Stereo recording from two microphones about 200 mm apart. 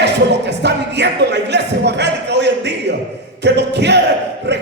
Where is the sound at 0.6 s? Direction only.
60° right (ahead or behind).